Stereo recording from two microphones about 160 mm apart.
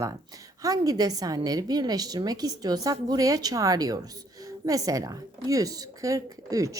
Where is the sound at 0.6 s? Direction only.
20° right (ahead or behind).